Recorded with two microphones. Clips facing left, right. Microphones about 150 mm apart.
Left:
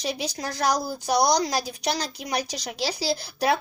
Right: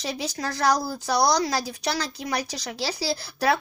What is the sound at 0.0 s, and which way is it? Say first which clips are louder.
Speech: even; 15° left (ahead or behind).